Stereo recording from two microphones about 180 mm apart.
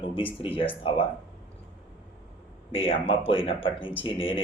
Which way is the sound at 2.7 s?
30° left (ahead or behind).